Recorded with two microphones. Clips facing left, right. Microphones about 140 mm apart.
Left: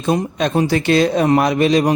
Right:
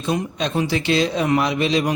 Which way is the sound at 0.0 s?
45° left (ahead or behind).